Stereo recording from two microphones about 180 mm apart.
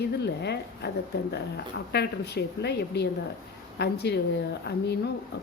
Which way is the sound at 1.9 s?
65° left (ahead or behind).